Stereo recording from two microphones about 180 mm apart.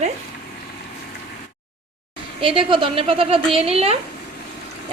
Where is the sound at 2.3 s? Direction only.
30° right (ahead or behind).